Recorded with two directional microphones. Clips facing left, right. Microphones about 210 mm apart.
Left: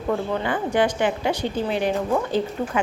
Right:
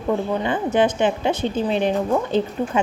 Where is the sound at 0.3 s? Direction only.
20° right (ahead or behind).